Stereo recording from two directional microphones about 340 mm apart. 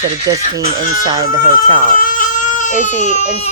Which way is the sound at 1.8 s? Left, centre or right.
Left.